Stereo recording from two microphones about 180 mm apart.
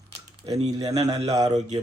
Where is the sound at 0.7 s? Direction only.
20° right (ahead or behind).